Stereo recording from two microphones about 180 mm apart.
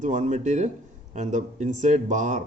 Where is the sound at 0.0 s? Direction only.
40° right (ahead or behind).